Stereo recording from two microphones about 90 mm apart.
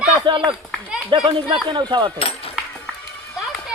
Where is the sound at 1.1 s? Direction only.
65° right (ahead or behind).